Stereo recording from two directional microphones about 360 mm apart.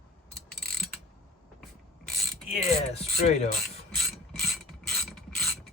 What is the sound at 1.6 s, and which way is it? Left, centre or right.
Ratchet, centre.